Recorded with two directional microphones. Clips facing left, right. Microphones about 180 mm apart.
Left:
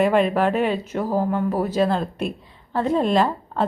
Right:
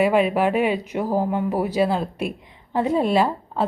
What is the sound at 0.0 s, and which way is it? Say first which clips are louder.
A woman's voice: even; 10° right (ahead or behind).